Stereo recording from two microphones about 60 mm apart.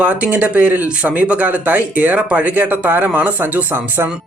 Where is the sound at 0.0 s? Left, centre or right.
Right.